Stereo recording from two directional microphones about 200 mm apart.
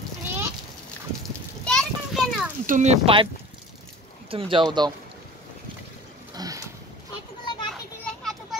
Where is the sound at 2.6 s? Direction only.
35° right (ahead or behind).